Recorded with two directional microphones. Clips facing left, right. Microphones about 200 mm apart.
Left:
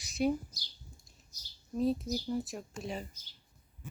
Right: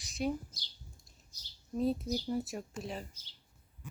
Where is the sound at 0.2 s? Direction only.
5° left (ahead or behind).